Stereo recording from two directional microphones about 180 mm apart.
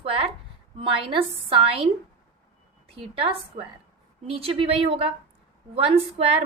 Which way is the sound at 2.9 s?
30° right (ahead or behind).